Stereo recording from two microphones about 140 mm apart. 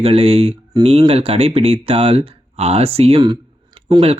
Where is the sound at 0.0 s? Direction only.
45° right (ahead or behind).